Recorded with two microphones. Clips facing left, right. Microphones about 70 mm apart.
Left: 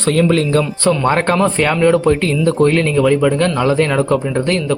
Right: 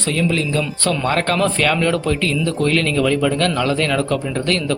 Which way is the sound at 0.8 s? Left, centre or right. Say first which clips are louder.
Left 3 dB; left.